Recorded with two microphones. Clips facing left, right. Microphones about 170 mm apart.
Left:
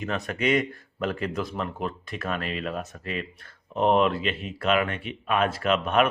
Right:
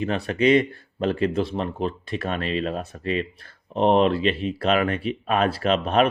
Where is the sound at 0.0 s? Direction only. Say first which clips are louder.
Right 6 dB; 30° right (ahead or behind).